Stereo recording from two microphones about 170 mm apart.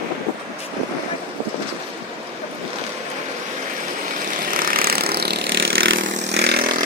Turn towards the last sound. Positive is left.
turn(degrees=-70)  # may be behind; listen again after turning